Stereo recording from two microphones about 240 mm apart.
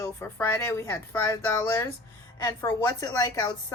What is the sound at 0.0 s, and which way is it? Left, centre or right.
Speech, centre.